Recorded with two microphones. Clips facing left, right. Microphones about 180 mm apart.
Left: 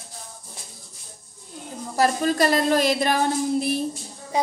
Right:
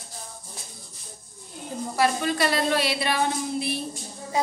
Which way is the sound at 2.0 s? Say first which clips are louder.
Left 3 dB; 40° left (ahead or behind).